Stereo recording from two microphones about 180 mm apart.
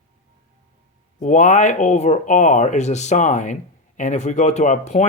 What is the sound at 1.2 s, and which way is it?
Speech, 45° left (ahead or behind).